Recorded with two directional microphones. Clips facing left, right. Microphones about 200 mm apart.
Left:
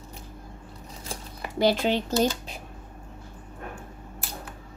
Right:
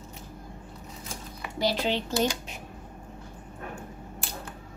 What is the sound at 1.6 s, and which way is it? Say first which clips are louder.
Speech: left 5 dB; 50° left (ahead or behind).